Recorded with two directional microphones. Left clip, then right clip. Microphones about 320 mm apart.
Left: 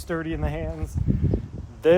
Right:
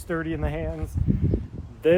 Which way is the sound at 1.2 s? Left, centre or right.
Centre.